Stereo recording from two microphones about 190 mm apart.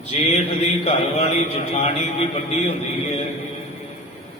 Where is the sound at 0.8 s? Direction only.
30° left (ahead or behind).